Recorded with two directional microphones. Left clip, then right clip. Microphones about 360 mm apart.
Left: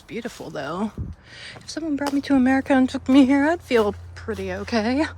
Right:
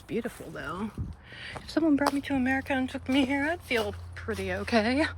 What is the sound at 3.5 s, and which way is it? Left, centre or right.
Speech, centre.